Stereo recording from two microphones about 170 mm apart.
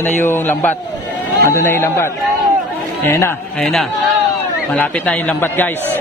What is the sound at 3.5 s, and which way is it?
A man's voice, 5° left (ahead or behind).